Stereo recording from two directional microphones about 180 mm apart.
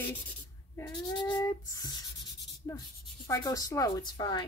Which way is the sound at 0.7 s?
15° left (ahead or behind).